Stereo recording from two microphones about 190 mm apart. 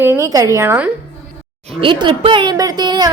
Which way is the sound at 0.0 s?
15° right (ahead or behind).